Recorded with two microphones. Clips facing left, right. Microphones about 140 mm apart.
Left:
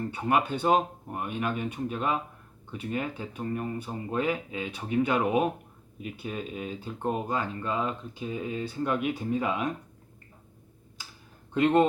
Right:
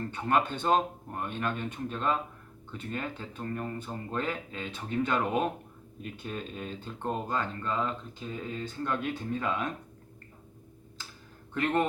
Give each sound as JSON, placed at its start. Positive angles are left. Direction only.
{"t": 0.0, "sound": "speech", "side_deg": 10}
{"t": 11.5, "sound": "speech", "side_deg": 20}